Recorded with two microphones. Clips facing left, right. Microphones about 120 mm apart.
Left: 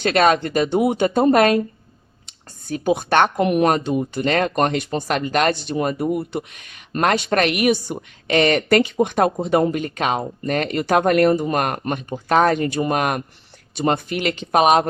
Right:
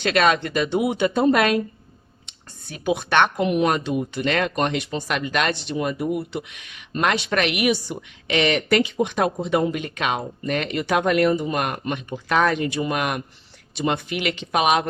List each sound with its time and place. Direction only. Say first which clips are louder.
0.0 s speech: left 3 dB; 40° left (ahead or behind)
3.8 s speech: left 3 dB; 40° left (ahead or behind)